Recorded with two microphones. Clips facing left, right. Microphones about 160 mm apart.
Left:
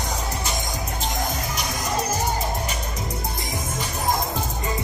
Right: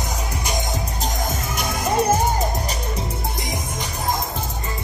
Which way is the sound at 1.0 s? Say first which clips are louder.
Right 1 dB; 50° right (ahead or behind).